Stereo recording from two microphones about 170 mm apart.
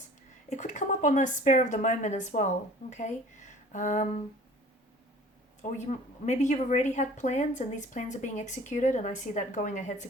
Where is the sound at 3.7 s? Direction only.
45° left (ahead or behind).